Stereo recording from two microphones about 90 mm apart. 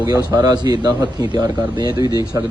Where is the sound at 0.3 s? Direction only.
45° right (ahead or behind).